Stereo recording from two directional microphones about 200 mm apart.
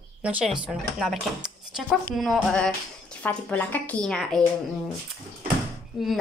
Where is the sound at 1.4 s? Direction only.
Centre (ahead or behind).